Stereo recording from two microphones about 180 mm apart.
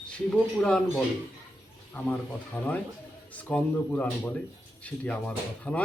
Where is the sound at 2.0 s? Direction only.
10° left (ahead or behind).